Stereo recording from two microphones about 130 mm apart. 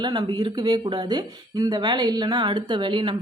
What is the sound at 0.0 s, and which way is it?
Speech, 35° right (ahead or behind).